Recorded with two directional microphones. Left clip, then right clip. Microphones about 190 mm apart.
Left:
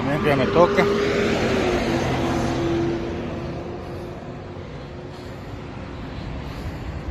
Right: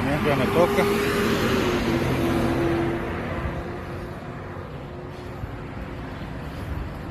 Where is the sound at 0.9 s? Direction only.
30° right (ahead or behind).